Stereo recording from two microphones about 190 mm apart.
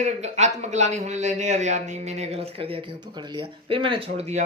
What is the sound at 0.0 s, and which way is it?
Speech, 35° right (ahead or behind).